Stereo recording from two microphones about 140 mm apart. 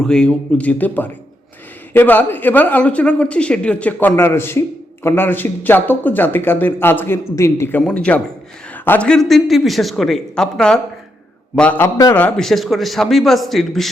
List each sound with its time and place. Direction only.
0.0 s a man's voice: 5° left (ahead or behind)